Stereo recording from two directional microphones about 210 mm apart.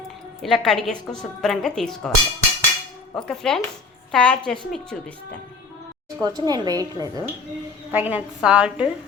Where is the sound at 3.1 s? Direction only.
5° left (ahead or behind).